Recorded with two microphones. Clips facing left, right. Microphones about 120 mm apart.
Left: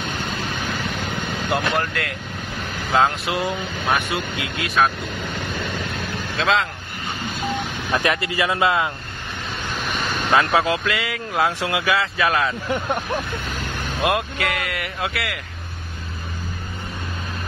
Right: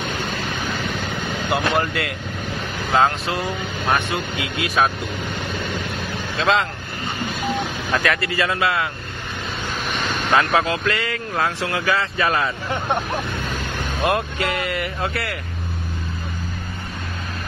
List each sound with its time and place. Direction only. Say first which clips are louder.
1.5 s speech: right 2 dB; 5° right (ahead or behind)
3.9 s speech: right 1 dB; centre (ahead or behind)
6.3 s speech: right 1 dB; centre (ahead or behind)
7.9 s speech: even; 20° left (ahead or behind)
10.5 s speech: even; 15° left (ahead or behind)
11.8 s speech: even; centre (ahead or behind)
14.0 s speech: right 1 dB; centre (ahead or behind)